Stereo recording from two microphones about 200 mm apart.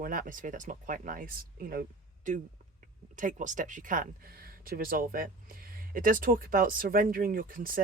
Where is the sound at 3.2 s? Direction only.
40° right (ahead or behind).